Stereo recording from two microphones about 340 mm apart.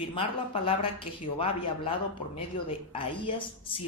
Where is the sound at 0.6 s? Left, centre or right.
Centre.